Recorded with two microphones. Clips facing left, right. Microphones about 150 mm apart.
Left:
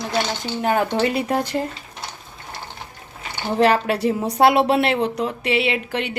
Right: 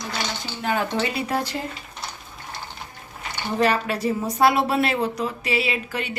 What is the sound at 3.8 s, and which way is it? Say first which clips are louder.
Speech: left 4 dB; 75° left (ahead or behind).